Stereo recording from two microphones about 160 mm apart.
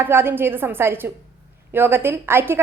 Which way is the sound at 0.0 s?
15° right (ahead or behind).